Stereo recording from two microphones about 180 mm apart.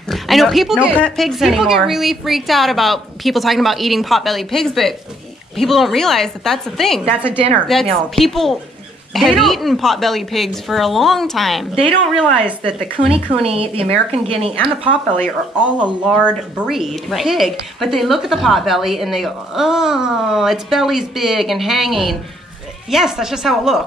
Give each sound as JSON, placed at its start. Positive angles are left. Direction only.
{"t": 0.1, "sound": "speech", "side_deg": 0}
{"t": 13.1, "sound": "speech", "side_deg": -30}
{"t": 16.0, "sound": "speech", "side_deg": -5}